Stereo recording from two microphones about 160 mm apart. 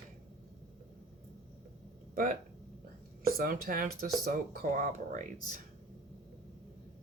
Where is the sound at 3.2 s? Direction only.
65° right (ahead or behind).